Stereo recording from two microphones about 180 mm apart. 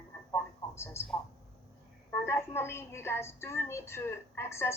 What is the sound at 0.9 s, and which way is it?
A woman's voice, 15° left (ahead or behind).